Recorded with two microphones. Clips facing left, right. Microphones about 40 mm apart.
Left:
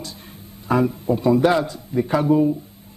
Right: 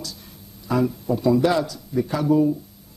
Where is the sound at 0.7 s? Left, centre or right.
Left.